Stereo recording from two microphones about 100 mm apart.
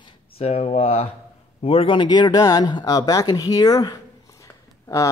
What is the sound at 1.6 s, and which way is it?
Speech, 70° left (ahead or behind).